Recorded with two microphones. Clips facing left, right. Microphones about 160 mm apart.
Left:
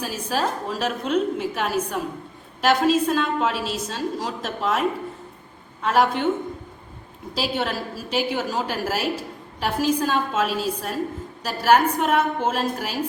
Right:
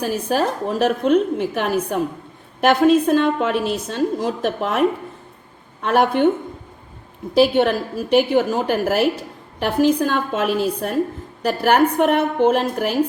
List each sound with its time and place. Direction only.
0.0 s a woman's voice: 50° right (ahead or behind)
7.3 s a woman's voice: 55° right (ahead or behind)